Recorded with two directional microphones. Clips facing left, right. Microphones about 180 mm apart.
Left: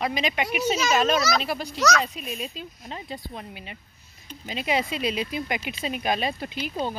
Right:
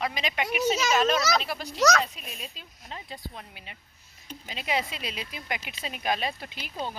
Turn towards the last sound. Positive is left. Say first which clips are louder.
# left 5 dB
turn(degrees=0)  # may be behind; listen again after turning